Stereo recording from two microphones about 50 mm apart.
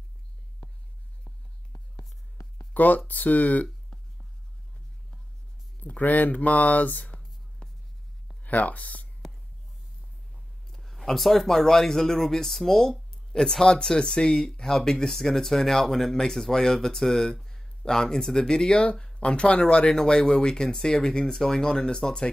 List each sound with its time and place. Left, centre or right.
2.7 s speech: left
5.8 s speech: left
8.5 s speech: left
10.7 s speech: centre